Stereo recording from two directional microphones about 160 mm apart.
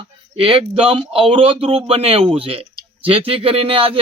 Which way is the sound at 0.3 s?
35° right (ahead or behind).